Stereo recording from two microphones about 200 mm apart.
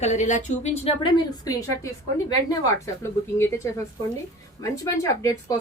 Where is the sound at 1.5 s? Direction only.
15° left (ahead or behind).